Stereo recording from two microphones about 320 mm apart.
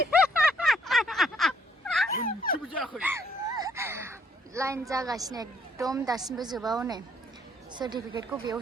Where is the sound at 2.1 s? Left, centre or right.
Left.